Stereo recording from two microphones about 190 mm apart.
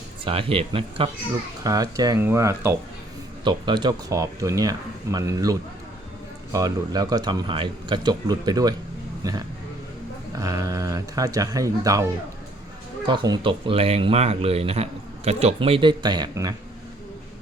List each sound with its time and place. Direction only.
0.3 s speech: 30° right (ahead or behind)
13.1 s speech: 25° right (ahead or behind)